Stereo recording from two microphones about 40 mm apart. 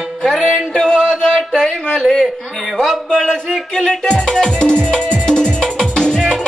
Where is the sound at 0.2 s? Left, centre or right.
Centre.